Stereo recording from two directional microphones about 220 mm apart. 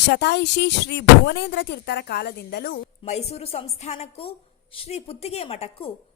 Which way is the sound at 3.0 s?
30° left (ahead or behind).